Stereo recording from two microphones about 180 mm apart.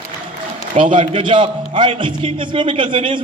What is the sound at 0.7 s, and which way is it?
A man's voice, 30° right (ahead or behind).